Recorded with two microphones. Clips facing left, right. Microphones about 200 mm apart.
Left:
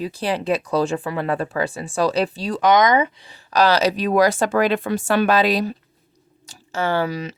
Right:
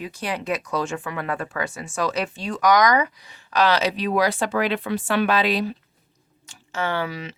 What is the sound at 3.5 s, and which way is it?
Speech, 40° left (ahead or behind).